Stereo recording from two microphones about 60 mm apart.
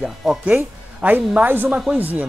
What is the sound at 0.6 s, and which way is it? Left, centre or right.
Speech, right.